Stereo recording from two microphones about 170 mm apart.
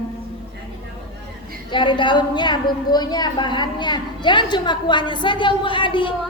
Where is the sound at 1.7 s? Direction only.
30° left (ahead or behind).